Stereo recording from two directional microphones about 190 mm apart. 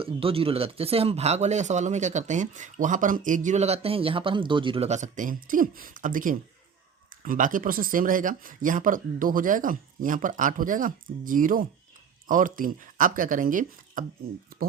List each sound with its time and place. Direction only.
0.0 s speech: 30° right (ahead or behind); by 14.0 s 45° right (ahead or behind)